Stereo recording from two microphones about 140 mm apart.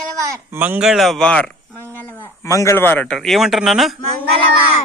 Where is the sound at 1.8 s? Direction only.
15° right (ahead or behind).